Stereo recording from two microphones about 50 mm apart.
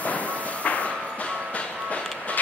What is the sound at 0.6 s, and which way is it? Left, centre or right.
Music, left.